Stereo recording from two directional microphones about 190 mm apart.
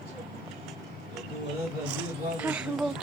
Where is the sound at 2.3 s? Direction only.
5° right (ahead or behind).